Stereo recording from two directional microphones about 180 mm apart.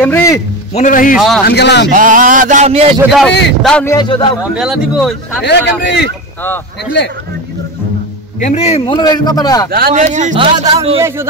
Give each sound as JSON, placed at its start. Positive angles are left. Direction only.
{"t": 0.0, "sound": "a man's voice", "side_deg": 15}
{"t": 0.7, "sound": "a man's voice", "side_deg": 45}
{"t": 1.1, "sound": "a man's voice", "side_deg": 0}
{"t": 1.4, "sound": "a man's voice", "side_deg": 70}
{"t": 1.9, "sound": "speech", "side_deg": -45}
{"t": 3.1, "sound": "a man's voice", "side_deg": 0}
{"t": 3.8, "sound": "a man's voice", "side_deg": 20}
{"t": 4.4, "sound": "a man's voice", "side_deg": -5}
{"t": 5.4, "sound": "a man's voice", "side_deg": 75}
{"t": 8.4, "sound": "a man's voice", "side_deg": 40}
{"t": 9.7, "sound": "speech", "side_deg": -55}
{"t": 10.0, "sound": "speech", "side_deg": -40}
{"t": 10.3, "sound": "speech", "side_deg": -25}
{"t": 11.0, "sound": "a man's voice", "side_deg": -15}